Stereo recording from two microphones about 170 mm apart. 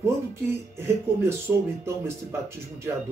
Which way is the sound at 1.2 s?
15° right (ahead or behind).